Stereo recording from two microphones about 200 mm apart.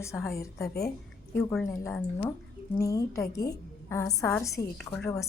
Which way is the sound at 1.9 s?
10° left (ahead or behind).